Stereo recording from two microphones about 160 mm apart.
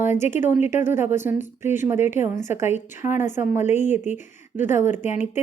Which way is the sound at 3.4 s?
50° left (ahead or behind).